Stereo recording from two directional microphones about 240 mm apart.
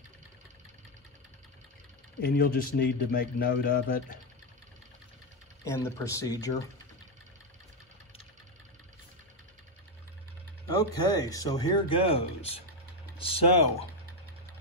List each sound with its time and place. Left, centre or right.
2.2 s a man's voice: left
5.7 s speech: centre
10.7 s speech: centre